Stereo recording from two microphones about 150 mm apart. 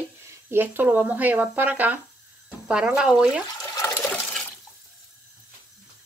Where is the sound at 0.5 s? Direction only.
15° right (ahead or behind).